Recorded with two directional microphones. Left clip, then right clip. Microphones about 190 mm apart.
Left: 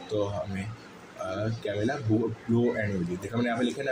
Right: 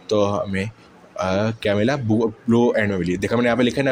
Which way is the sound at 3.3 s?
45° right (ahead or behind).